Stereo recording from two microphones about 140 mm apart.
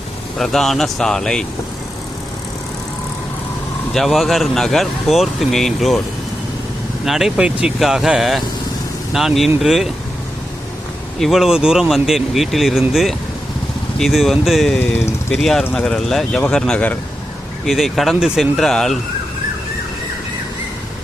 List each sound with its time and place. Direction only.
0.3 s speech: centre (ahead or behind)
3.9 s speech: centre (ahead or behind)
7.0 s speech: centre (ahead or behind)
11.2 s speech: centre (ahead or behind)